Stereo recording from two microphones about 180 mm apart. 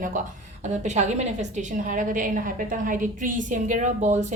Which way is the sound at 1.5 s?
45° right (ahead or behind).